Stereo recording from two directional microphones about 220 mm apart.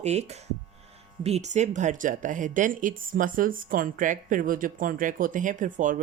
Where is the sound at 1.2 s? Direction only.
30° right (ahead or behind).